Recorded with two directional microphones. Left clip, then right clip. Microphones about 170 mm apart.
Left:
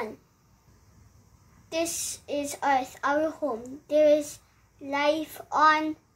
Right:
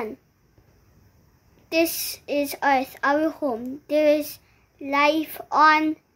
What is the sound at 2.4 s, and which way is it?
A woman's voice, 50° right (ahead or behind).